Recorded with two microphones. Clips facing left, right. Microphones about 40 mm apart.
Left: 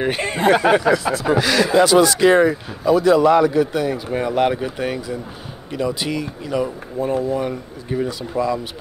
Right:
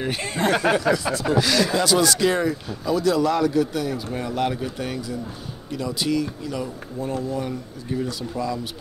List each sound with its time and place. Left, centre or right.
0.0 s speech: centre